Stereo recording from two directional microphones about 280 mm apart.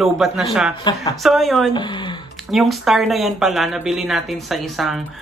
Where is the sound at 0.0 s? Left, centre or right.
Centre.